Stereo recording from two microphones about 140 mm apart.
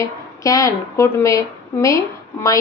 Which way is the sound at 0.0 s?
25° left (ahead or behind).